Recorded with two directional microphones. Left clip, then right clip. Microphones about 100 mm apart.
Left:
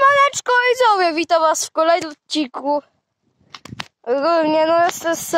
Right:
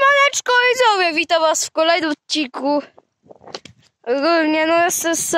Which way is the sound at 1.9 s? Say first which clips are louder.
Even; 15° right (ahead or behind).